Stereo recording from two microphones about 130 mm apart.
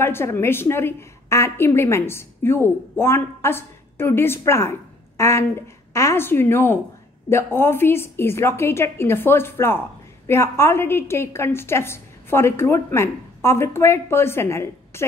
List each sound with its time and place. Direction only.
0.0 s a woman's voice: 20° left (ahead or behind)